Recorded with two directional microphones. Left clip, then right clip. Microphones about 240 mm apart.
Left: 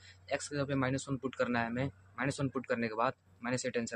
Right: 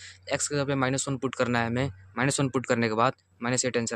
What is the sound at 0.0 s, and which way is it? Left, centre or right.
Speech, right.